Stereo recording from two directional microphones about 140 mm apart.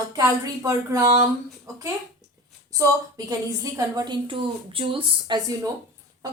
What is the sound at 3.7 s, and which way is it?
A woman's voice, 25° right (ahead or behind).